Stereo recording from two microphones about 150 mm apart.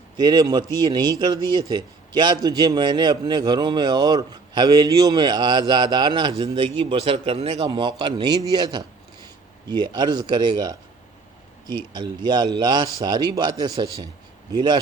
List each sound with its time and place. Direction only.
0.2 s a man's voice: 30° right (ahead or behind)
7.6 s a man's voice: 30° right (ahead or behind)